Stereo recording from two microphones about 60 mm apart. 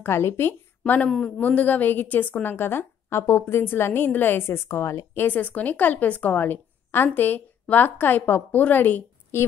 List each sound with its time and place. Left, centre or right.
0.0 s a woman's voice: left
5.1 s a woman's voice: left